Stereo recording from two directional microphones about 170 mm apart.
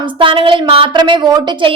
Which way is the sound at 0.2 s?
30° right (ahead or behind).